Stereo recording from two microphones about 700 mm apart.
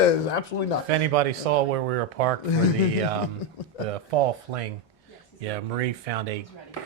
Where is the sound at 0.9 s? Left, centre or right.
Right.